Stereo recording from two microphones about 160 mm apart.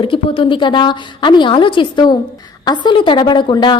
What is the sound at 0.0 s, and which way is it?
A woman's voice, 35° left (ahead or behind).